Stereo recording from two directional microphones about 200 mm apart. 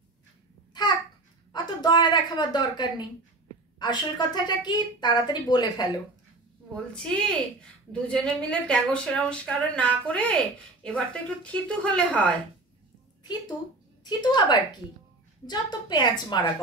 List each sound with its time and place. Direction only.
1.5 s a woman's voice: 20° left (ahead or behind)
6.7 s speech: 5° left (ahead or behind)
14.0 s a woman's voice: 20° left (ahead or behind)